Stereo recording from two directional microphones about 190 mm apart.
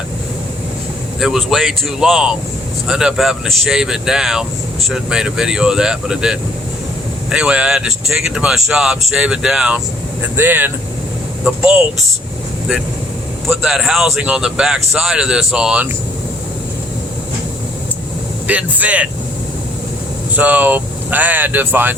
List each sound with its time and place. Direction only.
1.2 s speech: centre (ahead or behind)
13.7 s speech: centre (ahead or behind)
18.4 s speech: 10° right (ahead or behind)
20.3 s speech: 10° right (ahead or behind)